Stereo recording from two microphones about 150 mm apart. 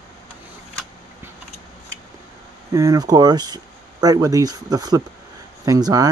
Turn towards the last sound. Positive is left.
turn(degrees=-25)  # may be behind; listen again after turning